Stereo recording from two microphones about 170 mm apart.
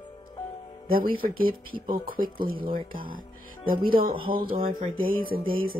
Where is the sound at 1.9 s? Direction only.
55° right (ahead or behind).